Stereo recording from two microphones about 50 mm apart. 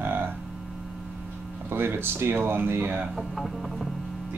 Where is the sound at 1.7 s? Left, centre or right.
Right.